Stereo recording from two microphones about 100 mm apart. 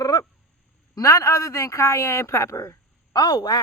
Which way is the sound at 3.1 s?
45° left (ahead or behind).